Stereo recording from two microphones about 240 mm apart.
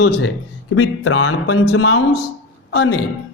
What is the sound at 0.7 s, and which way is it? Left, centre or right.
Speech, left.